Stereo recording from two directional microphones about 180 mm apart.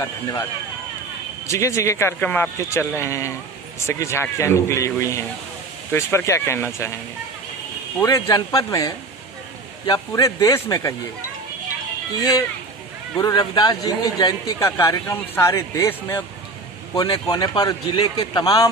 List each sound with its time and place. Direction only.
0.0 s speech: 15° left (ahead or behind)
1.5 s speech: 15° left (ahead or behind)
8.0 s a man's voice: 20° left (ahead or behind)
13.1 s a man's voice: 20° left (ahead or behind)